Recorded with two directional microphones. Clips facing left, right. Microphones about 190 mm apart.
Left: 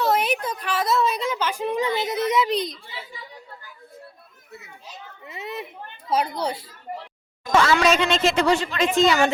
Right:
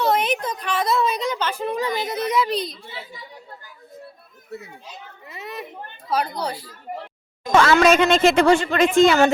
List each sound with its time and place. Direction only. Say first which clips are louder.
0.0 s a woman's voice: right 1 dB; 5° left (ahead or behind)
5.2 s a woman's voice: left 1 dB; 25° left (ahead or behind)
7.5 s speech: right 3 dB; 50° right (ahead or behind)